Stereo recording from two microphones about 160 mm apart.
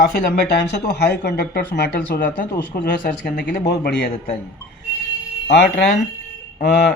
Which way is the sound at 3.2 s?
90° left.